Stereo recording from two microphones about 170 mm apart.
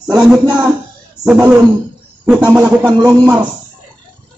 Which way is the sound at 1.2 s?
5° right (ahead or behind).